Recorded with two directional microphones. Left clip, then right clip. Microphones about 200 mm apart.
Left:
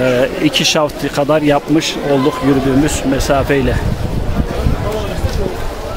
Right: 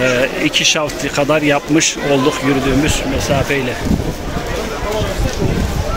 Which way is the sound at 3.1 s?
35° left (ahead or behind).